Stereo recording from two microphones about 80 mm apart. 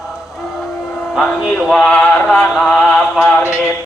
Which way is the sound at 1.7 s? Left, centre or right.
Centre.